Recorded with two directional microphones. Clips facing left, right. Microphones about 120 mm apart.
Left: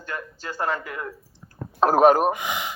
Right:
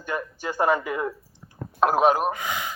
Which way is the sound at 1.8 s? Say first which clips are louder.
Left 3 dB; 45° left (ahead or behind).